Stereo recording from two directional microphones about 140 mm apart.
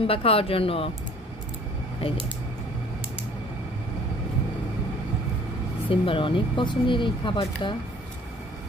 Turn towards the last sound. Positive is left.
turn(degrees=35)  # may be behind; listen again after turning